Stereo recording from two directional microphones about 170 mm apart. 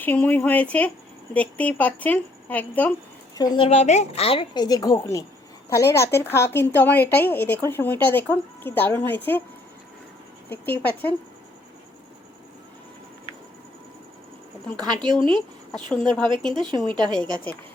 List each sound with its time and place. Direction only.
0.0 s a woman's voice: 10° left (ahead or behind)
3.3 s a woman's voice: 20° left (ahead or behind)
3.6 s a woman's voice: 40° left (ahead or behind); by 9.4 s 10° left (ahead or behind)
10.5 s a woman's voice: 10° left (ahead or behind)
14.8 s a woman's voice: 25° right (ahead or behind)
16.4 s a woman's voice: centre (ahead or behind)
16.7 s a woman's voice: 30° right (ahead or behind)
17.0 s a woman's voice: 5° left (ahead or behind)